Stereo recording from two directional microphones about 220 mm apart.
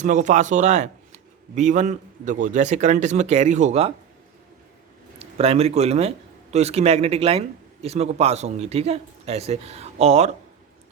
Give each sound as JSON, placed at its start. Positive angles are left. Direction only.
{"t": 0.0, "sound": "speech", "side_deg": -35}
{"t": 5.2, "sound": "a man's voice", "side_deg": -25}